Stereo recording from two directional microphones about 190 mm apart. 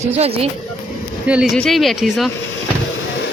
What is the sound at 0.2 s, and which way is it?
Speech, 30° right (ahead or behind).